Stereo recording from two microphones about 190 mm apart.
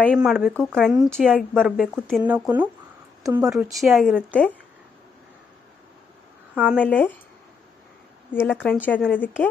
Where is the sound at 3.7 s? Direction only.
Centre (ahead or behind).